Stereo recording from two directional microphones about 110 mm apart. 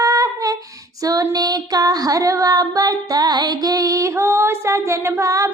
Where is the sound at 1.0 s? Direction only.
35° right (ahead or behind).